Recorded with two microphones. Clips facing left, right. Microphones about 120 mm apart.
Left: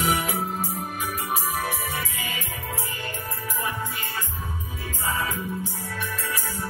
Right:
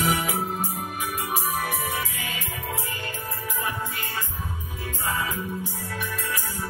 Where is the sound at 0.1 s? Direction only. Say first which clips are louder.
Even; 15° right (ahead or behind).